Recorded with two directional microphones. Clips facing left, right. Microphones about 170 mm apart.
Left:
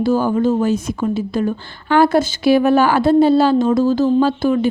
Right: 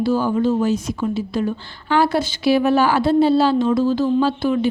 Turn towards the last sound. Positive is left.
turn(degrees=45)  # may be behind; listen again after turning